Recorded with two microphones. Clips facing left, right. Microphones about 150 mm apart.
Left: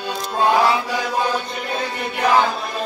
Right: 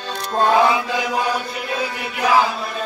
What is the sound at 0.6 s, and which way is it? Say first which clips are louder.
Mantra: right 1 dB; 15° right (ahead or behind).